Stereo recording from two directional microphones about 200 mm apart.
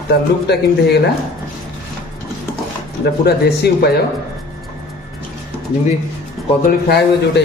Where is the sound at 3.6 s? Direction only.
55° left (ahead or behind).